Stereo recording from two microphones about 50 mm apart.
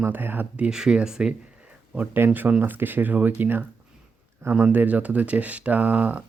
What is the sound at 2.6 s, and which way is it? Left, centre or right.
Speech, right.